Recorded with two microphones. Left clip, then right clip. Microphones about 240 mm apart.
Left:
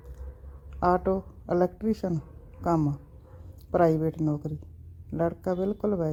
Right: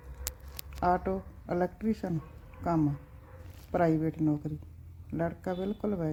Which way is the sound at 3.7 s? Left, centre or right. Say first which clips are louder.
Left 5 dB; centre.